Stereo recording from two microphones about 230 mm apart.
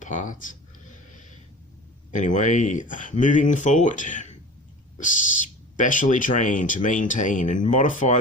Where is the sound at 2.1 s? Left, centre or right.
Left.